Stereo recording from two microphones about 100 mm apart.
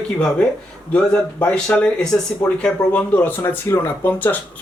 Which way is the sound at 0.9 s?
15° left (ahead or behind).